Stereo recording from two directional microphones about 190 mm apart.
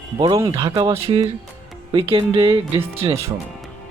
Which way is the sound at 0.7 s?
15° right (ahead or behind).